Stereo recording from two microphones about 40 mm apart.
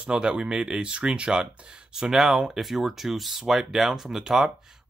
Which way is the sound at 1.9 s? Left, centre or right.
Centre.